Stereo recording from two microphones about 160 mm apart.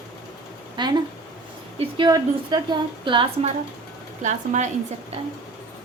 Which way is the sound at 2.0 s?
25° right (ahead or behind).